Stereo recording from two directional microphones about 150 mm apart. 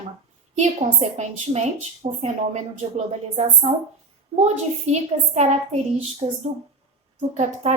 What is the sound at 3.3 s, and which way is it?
A woman's voice, 45° right (ahead or behind).